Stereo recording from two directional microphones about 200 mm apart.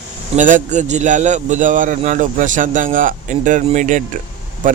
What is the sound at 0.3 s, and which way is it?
Speech, 40° right (ahead or behind).